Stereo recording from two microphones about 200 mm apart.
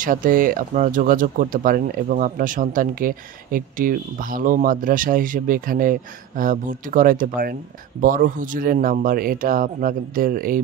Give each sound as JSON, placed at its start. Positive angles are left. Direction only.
{"t": 0.0, "sound": "speech", "side_deg": -40}